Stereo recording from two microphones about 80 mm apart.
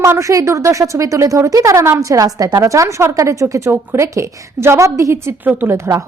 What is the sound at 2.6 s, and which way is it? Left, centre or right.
A woman's voice, right.